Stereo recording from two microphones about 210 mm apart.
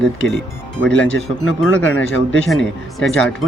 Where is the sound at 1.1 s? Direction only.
70° left (ahead or behind).